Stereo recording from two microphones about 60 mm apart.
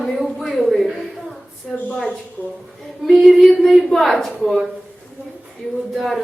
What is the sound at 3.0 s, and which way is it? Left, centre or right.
Female singing, centre.